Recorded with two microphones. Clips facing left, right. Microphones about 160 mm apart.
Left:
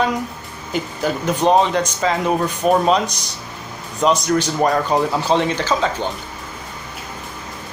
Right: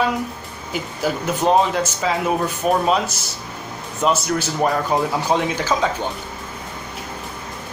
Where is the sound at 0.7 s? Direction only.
10° right (ahead or behind).